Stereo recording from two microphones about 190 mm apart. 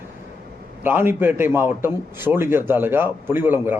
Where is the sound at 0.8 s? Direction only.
10° right (ahead or behind).